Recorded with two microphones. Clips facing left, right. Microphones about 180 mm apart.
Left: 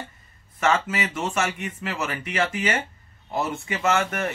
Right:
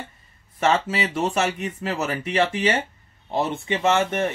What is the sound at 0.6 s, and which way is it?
A man's voice, 30° right (ahead or behind).